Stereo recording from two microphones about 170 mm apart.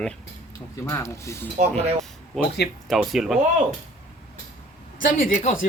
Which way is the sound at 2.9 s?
Centre (ahead or behind).